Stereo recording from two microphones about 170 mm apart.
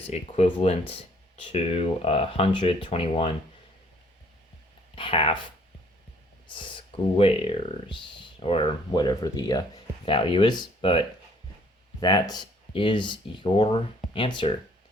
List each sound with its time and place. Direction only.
0.0 s speech: 40° left (ahead or behind)
4.9 s speech: 30° left (ahead or behind)
6.5 s speech: 30° left (ahead or behind)